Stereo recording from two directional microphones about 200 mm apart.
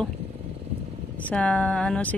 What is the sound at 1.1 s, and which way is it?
Speech, 5° left (ahead or behind).